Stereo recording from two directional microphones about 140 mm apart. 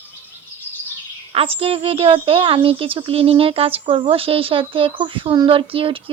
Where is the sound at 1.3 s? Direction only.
45° right (ahead or behind).